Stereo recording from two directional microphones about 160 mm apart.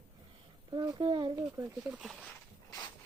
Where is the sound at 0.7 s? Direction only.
30° right (ahead or behind).